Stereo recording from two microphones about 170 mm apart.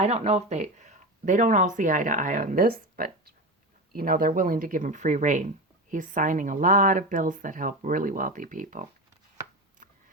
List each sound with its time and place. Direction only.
0.0 s speech: 40° right (ahead or behind)